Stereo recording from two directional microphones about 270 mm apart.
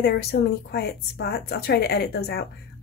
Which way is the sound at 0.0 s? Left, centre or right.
Left.